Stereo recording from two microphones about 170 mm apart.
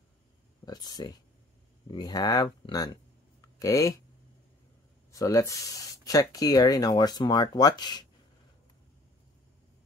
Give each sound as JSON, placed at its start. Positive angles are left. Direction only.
{"t": 0.7, "sound": "speech", "side_deg": 25}
{"t": 5.1, "sound": "speech", "side_deg": 20}